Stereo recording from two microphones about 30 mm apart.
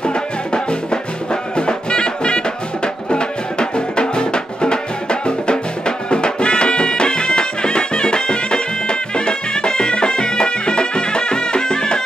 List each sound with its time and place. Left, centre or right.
0.0 s music: left